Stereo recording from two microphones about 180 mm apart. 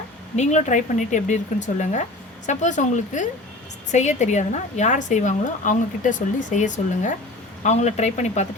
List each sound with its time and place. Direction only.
0.3 s a woman's voice: 40° left (ahead or behind)